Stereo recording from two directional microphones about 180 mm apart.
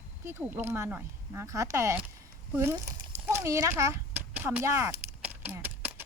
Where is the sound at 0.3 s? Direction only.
10° right (ahead or behind).